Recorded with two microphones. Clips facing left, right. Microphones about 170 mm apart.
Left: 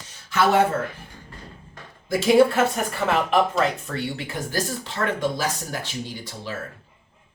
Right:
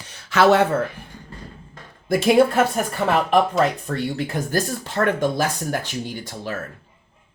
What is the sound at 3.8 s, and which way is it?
Speech, 45° right (ahead or behind).